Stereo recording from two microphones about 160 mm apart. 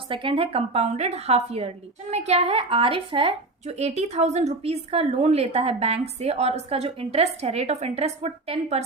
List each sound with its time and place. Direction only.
0.1 s a woman's voice: 30° right (ahead or behind)